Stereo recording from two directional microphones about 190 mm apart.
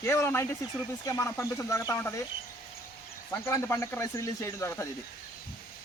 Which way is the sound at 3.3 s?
15° left (ahead or behind).